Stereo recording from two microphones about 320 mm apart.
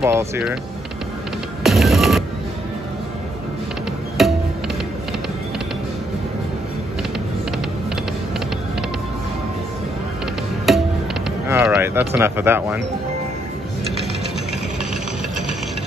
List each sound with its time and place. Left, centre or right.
0.0 s speech: centre
1.6 s music: centre
4.2 s music: centre
10.7 s music: centre
11.4 s speech: centre